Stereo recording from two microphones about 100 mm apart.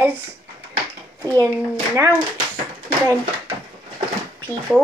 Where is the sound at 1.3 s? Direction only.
30° right (ahead or behind).